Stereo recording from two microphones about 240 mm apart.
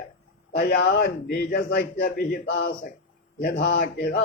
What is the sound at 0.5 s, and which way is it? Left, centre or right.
A man's voice, left.